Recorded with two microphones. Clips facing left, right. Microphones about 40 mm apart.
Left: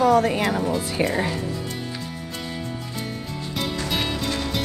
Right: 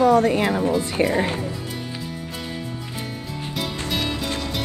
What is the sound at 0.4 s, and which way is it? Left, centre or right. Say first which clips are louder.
Speech: right 2 dB; centre.